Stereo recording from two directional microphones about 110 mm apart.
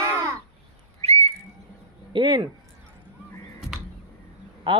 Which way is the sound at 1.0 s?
75° right (ahead or behind).